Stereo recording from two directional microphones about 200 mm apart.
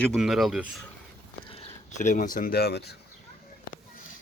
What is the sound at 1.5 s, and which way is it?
Speech, 35° left (ahead or behind).